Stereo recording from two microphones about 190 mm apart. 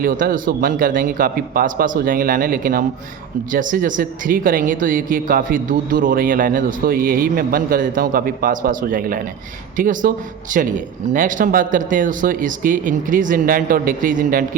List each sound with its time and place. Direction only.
0.0 s speech: 50° right (ahead or behind)